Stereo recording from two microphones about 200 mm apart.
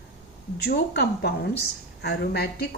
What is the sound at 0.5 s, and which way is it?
A woman's voice, 55° left (ahead or behind).